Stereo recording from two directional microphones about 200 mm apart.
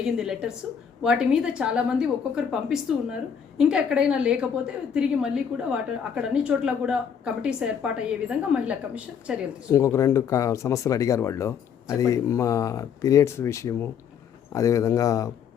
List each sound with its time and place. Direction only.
0.0 s a woman's voice: centre (ahead or behind)
9.6 s speech: 15° left (ahead or behind)